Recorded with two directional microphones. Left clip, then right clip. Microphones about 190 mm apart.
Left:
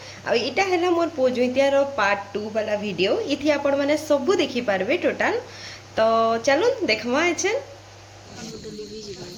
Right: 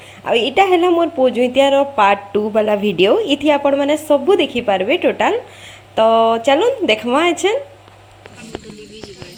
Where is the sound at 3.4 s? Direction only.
15° right (ahead or behind).